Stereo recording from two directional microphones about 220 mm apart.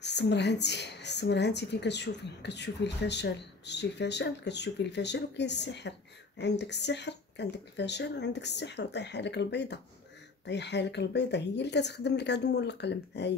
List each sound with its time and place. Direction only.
0.0 s a woman's voice: 50° left (ahead or behind)